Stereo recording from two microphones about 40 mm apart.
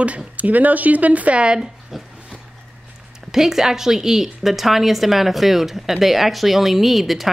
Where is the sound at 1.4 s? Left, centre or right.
Right.